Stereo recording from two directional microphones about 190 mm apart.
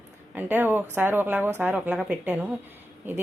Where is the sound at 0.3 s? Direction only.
10° right (ahead or behind).